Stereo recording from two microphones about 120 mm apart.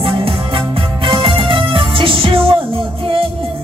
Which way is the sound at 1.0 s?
45° right (ahead or behind).